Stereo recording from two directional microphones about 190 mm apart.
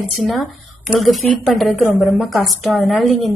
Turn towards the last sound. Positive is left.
turn(degrees=0)  # may be behind; listen again after turning